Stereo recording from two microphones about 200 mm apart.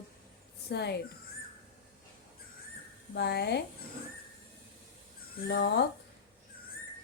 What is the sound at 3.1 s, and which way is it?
Speech, 55° left (ahead or behind).